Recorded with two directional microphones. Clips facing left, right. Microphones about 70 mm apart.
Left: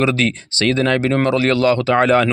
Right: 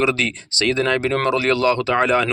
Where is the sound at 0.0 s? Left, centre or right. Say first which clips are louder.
Left 3 dB; left.